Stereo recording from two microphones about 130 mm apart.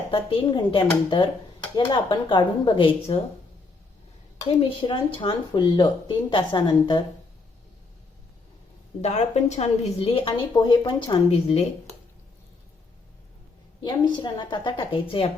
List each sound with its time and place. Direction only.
0.1 s speech: 45° left (ahead or behind)
4.4 s speech: 40° left (ahead or behind)
9.0 s a woman's voice: 60° left (ahead or behind)
10.5 s speech: 30° left (ahead or behind)
10.8 s a woman's voice: 40° left (ahead or behind)
13.8 s speech: 35° left (ahead or behind)